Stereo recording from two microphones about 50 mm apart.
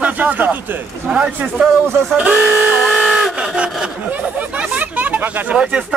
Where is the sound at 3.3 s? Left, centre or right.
Right.